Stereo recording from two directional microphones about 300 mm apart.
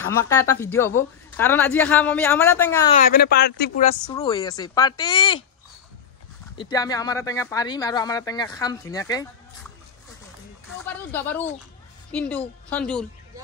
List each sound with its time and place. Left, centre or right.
0.1 s speech: centre
2.9 s speech: left
4.1 s speech: centre
6.5 s speech: centre
10.9 s a woman's voice: centre